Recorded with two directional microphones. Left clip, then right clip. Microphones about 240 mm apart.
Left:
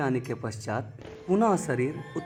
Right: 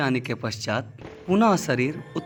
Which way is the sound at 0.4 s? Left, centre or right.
Centre.